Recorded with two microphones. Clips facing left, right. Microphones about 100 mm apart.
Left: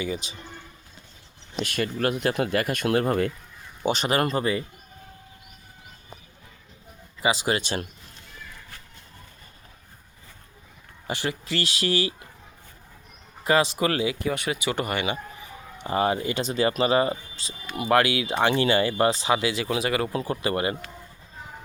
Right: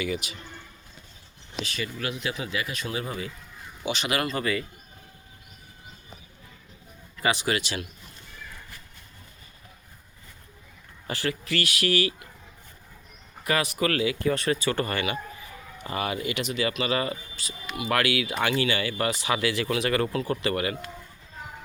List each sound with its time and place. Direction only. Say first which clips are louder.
0.0 s speech: even; 25° left (ahead or behind)
1.6 s speech: left 8 dB; 55° left (ahead or behind)
3.8 s speech: left 4 dB; 40° left (ahead or behind)
7.2 s speech: left 2 dB; 15° left (ahead or behind)
11.0 s speech: left 1 dB; 20° left (ahead or behind)
13.4 s speech: left 4 dB; 25° left (ahead or behind)